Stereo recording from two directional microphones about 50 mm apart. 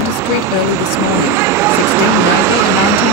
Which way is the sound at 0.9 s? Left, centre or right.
Right.